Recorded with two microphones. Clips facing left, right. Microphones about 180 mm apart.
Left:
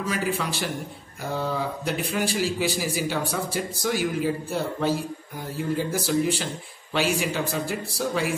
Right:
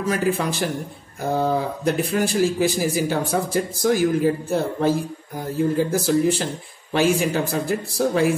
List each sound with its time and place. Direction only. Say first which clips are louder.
0.0 s speech: right 5 dB; 45° right (ahead or behind)